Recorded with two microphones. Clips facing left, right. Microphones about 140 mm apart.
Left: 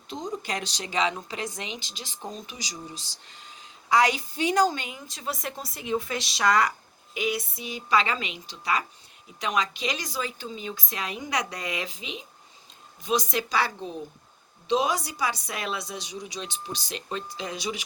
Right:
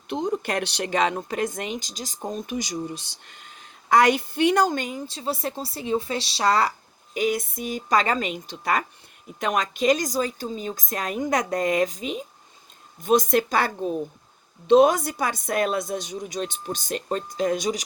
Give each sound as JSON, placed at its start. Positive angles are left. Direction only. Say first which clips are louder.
{"t": 0.1, "sound": "speech", "louder": "right 7 dB", "side_deg": -60}